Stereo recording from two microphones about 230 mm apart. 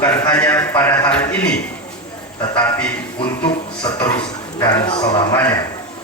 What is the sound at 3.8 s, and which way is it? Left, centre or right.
A man's voice, centre.